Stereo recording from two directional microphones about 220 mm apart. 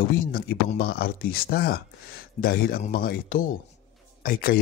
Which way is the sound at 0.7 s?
45° left (ahead or behind).